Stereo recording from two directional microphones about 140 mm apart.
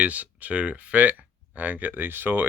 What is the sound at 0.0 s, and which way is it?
Speech, 10° right (ahead or behind).